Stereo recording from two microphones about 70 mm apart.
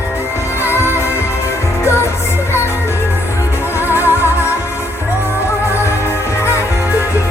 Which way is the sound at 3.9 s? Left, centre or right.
Right.